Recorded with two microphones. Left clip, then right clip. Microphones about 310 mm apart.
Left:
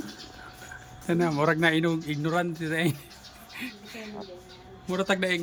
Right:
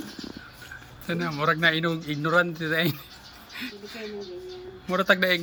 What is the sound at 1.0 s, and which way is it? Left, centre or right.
A man's voice, centre.